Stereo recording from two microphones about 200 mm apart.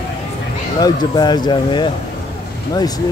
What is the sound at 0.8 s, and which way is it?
Speech, 20° left (ahead or behind).